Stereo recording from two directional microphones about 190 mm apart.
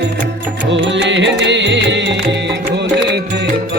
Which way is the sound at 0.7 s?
70° right (ahead or behind).